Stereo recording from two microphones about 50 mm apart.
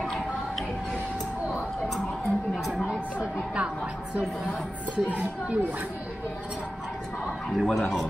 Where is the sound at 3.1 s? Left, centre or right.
Right.